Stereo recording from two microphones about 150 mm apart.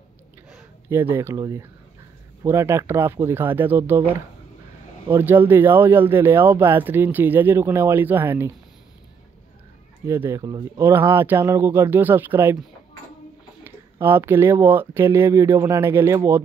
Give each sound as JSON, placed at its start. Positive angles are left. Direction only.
{"t": 0.8, "sound": "speech", "side_deg": -15}
{"t": 5.1, "sound": "speech", "side_deg": -15}
{"t": 10.0, "sound": "speech", "side_deg": -20}
{"t": 13.7, "sound": "speech", "side_deg": -15}